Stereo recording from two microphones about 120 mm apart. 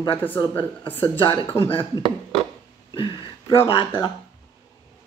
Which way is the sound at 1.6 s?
50° left (ahead or behind).